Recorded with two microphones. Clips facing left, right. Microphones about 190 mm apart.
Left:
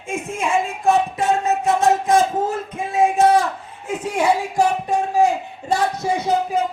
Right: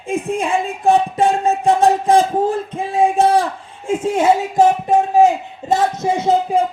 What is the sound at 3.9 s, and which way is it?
Music, 25° right (ahead or behind).